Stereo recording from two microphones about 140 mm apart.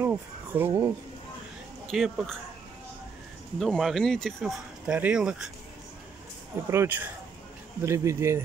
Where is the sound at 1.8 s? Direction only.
Centre (ahead or behind).